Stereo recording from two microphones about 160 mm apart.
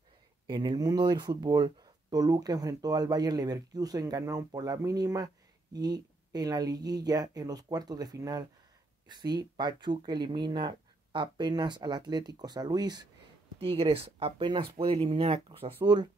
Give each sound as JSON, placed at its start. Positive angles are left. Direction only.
{"t": 0.5, "sound": "speech", "side_deg": -25}
{"t": 13.6, "sound": "speech", "side_deg": -35}